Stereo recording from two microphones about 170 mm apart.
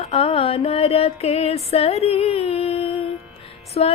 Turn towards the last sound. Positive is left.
turn(degrees=35)  # may be behind; listen again after turning